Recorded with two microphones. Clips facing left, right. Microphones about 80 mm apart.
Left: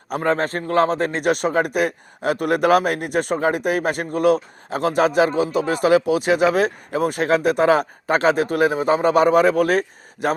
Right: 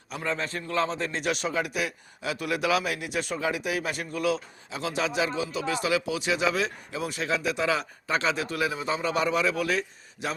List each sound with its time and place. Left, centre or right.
0.1 s a man's voice: left